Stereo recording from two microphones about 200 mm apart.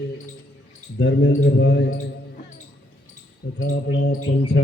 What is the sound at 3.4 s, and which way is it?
Speech, 50° left (ahead or behind).